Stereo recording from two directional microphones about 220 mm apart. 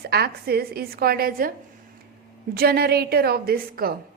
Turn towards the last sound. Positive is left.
turn(degrees=-45)  # may be behind; listen again after turning